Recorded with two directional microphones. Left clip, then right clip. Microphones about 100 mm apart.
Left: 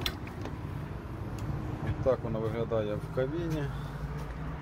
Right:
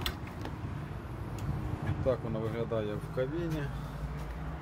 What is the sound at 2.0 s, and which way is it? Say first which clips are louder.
Speech: left 3 dB; 25° right (ahead or behind).